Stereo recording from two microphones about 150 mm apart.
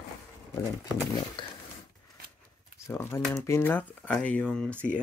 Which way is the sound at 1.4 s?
30° left (ahead or behind).